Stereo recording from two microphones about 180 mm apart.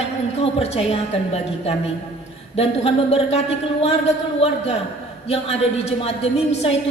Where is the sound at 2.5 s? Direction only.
35° left (ahead or behind).